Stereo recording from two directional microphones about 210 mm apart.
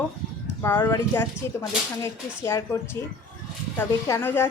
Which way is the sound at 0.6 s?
10° left (ahead or behind).